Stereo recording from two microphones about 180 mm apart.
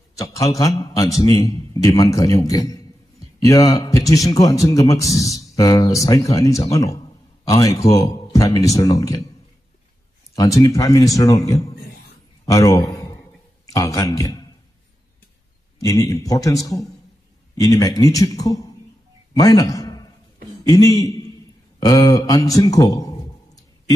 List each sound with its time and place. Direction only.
0.2 s a man's voice: 20° left (ahead or behind)
10.3 s a man's voice: 20° left (ahead or behind)
15.8 s a man's voice: 15° left (ahead or behind)